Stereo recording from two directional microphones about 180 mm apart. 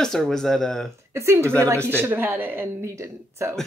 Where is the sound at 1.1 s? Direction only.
15° right (ahead or behind).